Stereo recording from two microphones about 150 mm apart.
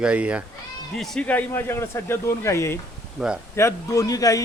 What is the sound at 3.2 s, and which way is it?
Speech, 5° right (ahead or behind).